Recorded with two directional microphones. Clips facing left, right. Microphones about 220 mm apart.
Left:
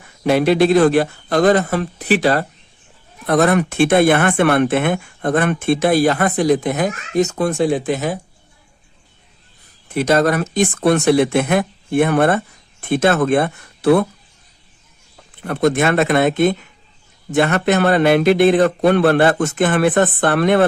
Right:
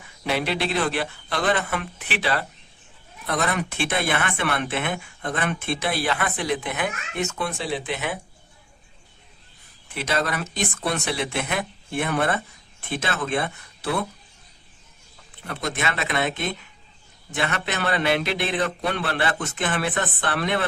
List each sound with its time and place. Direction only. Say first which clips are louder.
0.3 s speech: left 12 dB; 45° left (ahead or behind)
9.9 s speech: left 11 dB; 45° left (ahead or behind)
15.4 s speech: left 12 dB; 50° left (ahead or behind)